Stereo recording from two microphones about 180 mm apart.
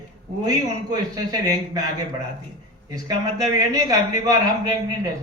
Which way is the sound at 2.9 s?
20° right (ahead or behind).